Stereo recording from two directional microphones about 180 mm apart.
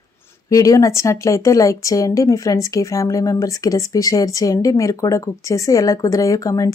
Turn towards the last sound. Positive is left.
turn(degrees=20)  # may be behind; listen again after turning